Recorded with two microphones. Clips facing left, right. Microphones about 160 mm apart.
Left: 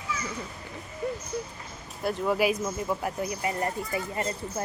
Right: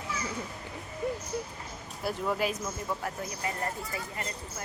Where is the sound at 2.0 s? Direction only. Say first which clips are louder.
Left 5 dB; 5° left (ahead or behind).